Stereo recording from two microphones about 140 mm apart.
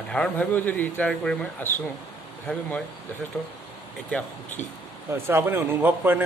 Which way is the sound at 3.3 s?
5° left (ahead or behind).